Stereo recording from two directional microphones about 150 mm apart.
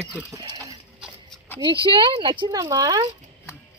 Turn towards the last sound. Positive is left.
turn(degrees=-25)  # may be behind; listen again after turning